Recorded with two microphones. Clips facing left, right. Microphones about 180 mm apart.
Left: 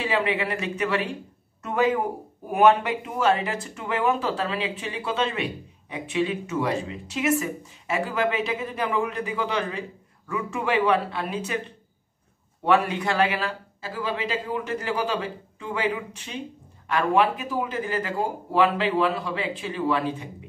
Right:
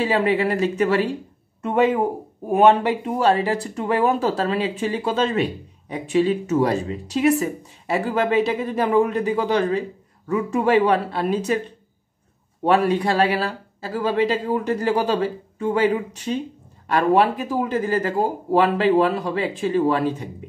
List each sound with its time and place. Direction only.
0.0 s speech: 40° right (ahead or behind)
1.6 s speech: 25° right (ahead or behind)
12.6 s speech: 35° right (ahead or behind)